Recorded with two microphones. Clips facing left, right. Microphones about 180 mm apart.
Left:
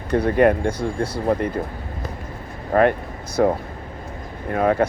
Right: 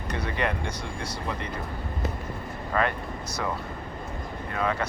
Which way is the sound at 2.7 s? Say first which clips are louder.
Left 10 dB; 50° left (ahead or behind).